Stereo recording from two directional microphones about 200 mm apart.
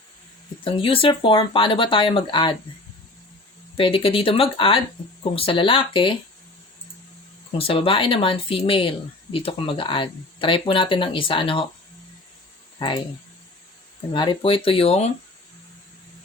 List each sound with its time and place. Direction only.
0.6 s speech: 25° left (ahead or behind)
3.8 s speech: 25° left (ahead or behind)
7.6 s speech: 25° left (ahead or behind)
12.8 s speech: 25° left (ahead or behind)
14.1 s speech: 25° left (ahead or behind)